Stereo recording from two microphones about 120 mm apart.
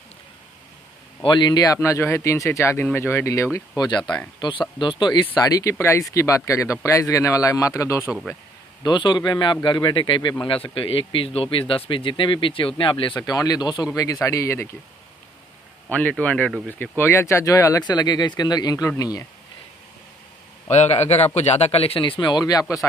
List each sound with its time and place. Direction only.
1.2 s speech: 40° left (ahead or behind)
8.8 s speech: 40° left (ahead or behind)
13.2 s speech: 30° left (ahead or behind)
15.9 s speech: 15° left (ahead or behind); by 19.2 s 30° left (ahead or behind)
20.7 s a man's voice: 65° left (ahead or behind); by 22.8 s 30° left (ahead or behind)